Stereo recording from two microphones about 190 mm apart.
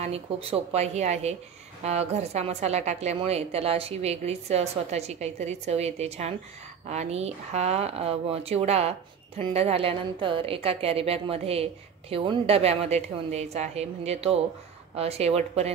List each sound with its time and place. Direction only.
0.0 s a woman's voice: 30° right (ahead or behind)